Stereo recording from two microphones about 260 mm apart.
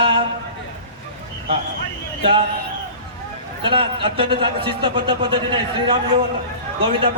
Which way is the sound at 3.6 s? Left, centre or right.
Centre.